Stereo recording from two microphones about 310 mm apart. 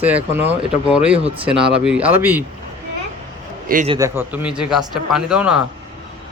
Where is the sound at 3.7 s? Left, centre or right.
Right.